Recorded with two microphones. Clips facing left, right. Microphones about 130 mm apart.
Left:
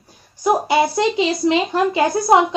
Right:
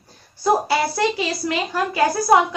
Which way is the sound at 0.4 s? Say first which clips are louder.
Left 2 dB; 15° left (ahead or behind).